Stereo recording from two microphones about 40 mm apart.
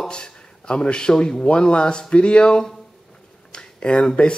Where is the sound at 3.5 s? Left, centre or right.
Left.